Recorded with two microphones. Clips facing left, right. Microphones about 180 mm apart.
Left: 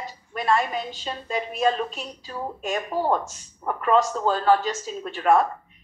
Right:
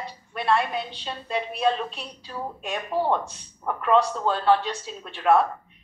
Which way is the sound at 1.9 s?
45° left (ahead or behind).